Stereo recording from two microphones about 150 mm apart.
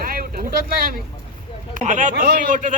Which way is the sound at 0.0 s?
75° right (ahead or behind).